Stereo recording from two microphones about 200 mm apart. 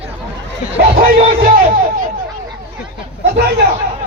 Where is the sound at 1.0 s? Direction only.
45° right (ahead or behind).